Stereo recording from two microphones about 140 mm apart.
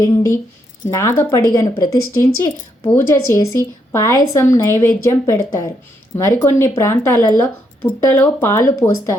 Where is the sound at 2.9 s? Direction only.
15° left (ahead or behind).